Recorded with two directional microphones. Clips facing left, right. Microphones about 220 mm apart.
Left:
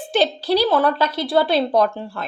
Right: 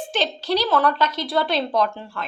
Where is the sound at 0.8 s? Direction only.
30° left (ahead or behind).